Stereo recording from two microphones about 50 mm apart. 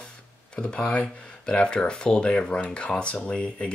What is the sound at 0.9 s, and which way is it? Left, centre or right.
Speech, left.